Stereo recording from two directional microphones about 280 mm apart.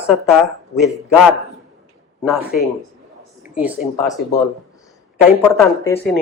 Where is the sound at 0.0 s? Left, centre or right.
Centre.